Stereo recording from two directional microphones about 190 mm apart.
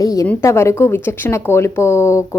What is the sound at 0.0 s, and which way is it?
A woman's voice, 20° left (ahead or behind).